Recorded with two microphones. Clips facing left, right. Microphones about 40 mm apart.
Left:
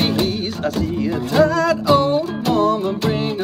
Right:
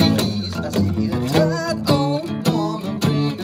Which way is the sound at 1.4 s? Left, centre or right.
Left.